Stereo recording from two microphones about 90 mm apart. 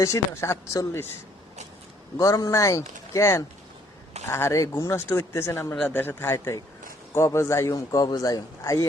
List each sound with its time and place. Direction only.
0.0 s a man's voice: 30° left (ahead or behind)
2.1 s a man's voice: 40° left (ahead or behind)